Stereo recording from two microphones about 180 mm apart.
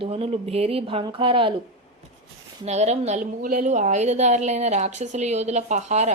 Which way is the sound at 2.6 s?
40° right (ahead or behind).